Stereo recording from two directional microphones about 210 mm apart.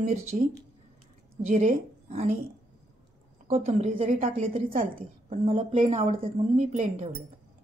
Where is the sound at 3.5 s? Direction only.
30° right (ahead or behind).